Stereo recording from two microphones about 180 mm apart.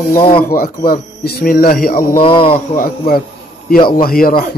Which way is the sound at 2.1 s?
30° left (ahead or behind).